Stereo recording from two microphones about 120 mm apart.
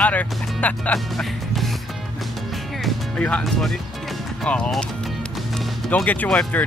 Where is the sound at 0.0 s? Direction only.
10° left (ahead or behind).